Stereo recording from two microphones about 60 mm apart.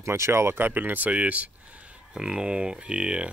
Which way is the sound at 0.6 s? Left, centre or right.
Right.